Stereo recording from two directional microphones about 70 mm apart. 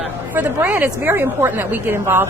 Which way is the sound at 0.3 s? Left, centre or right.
Right.